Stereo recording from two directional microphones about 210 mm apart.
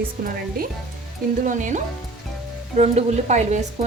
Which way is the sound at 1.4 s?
40° right (ahead or behind).